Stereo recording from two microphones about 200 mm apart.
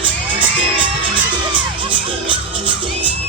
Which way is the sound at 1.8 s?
25° right (ahead or behind).